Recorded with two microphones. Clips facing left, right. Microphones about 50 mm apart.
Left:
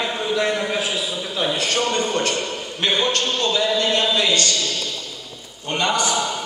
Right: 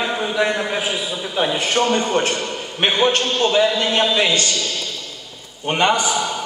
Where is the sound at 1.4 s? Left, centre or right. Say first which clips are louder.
Right 3 dB; centre.